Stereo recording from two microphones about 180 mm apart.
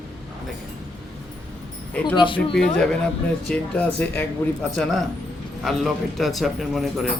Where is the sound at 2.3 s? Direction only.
5° left (ahead or behind).